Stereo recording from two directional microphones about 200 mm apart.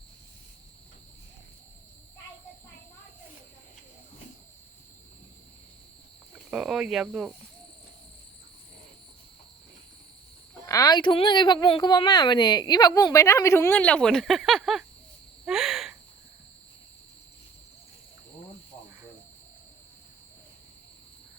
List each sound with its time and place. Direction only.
6.5 s speech: 5° right (ahead or behind)
10.7 s speech: 20° left (ahead or behind); by 14.8 s centre (ahead or behind)
15.4 s a sound: centre (ahead or behind)